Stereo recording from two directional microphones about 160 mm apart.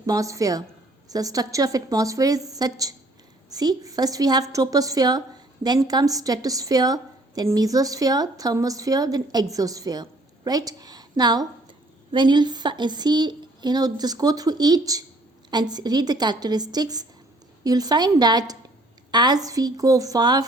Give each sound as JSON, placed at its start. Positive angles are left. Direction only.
{"t": 0.0, "sound": "a woman's voice", "side_deg": -20}